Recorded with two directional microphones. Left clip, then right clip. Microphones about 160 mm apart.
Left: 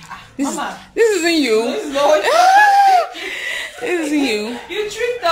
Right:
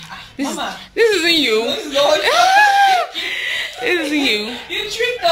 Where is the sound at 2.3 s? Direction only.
20° left (ahead or behind).